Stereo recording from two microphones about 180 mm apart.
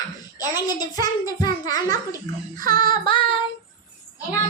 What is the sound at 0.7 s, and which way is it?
Speech, 20° left (ahead or behind).